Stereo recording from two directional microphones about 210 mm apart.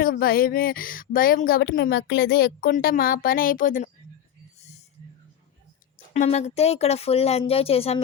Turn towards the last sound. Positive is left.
turn(degrees=30)  # may be behind; listen again after turning